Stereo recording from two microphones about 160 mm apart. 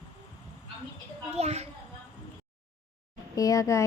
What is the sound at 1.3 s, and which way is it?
Speech, 40° right (ahead or behind).